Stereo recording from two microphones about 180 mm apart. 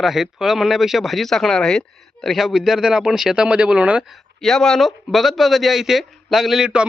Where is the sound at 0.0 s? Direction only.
Centre (ahead or behind).